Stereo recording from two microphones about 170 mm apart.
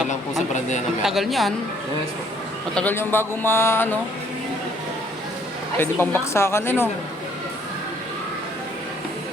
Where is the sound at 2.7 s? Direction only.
10° left (ahead or behind).